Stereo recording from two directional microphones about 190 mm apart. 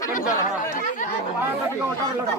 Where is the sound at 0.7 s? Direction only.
40° left (ahead or behind).